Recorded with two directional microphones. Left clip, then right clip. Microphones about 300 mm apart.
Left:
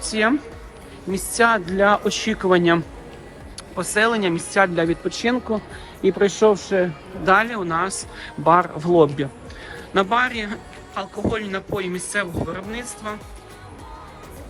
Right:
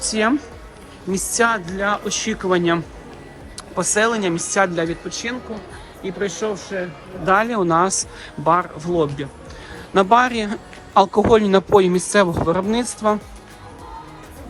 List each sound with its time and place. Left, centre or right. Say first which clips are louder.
0.0 s speech: right 1 dB; centre
7.3 s speech: right 1 dB; centre